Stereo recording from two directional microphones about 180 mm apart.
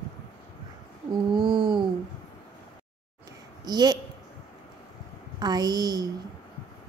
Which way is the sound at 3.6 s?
20° right (ahead or behind).